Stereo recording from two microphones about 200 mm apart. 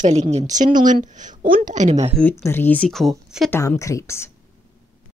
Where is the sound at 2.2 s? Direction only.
10° left (ahead or behind).